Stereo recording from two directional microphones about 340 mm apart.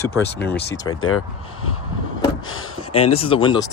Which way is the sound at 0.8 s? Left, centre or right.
Left.